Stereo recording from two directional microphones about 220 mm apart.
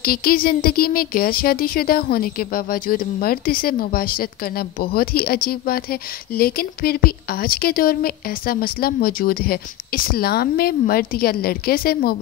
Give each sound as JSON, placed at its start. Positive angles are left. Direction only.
{"t": 0.0, "sound": "speech", "side_deg": 40}